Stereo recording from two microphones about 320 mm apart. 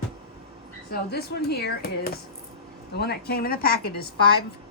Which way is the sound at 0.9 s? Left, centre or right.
Left.